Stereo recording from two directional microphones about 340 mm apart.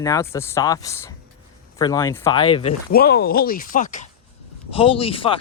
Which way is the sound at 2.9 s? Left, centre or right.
Left.